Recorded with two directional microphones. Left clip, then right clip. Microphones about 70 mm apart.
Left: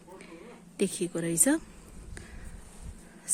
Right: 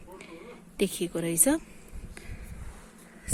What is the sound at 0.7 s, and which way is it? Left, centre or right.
Speech, left.